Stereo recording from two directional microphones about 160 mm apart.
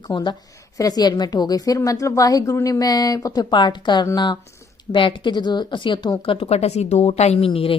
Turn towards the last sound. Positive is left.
turn(degrees=35)  # may be behind; listen again after turning